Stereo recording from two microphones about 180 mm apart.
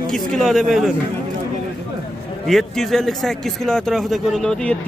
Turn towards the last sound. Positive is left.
turn(degrees=5)  # may be behind; listen again after turning